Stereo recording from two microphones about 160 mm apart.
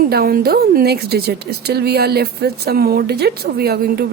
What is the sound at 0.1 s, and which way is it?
A woman's voice, 70° right (ahead or behind).